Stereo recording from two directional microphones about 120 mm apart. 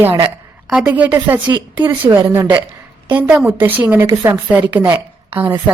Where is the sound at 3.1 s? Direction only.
15° right (ahead or behind).